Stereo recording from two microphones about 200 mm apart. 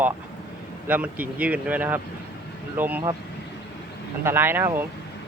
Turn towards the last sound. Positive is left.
turn(degrees=-10)  # may be behind; listen again after turning